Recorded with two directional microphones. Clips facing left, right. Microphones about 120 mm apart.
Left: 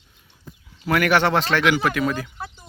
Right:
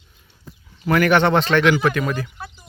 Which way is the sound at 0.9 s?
5° left (ahead or behind).